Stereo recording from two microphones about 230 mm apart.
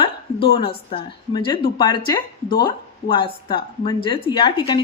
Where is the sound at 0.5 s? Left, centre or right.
Left.